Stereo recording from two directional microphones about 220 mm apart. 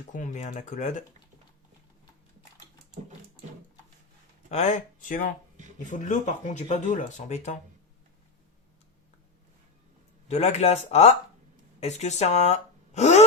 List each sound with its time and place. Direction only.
0.1 s speech: 35° left (ahead or behind)
4.5 s speech: 35° left (ahead or behind)
10.2 s speech: 30° left (ahead or behind)